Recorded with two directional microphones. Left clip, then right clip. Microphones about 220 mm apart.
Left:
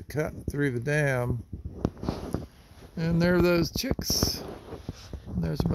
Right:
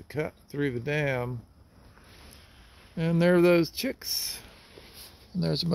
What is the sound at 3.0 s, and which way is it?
Speech, centre (ahead or behind).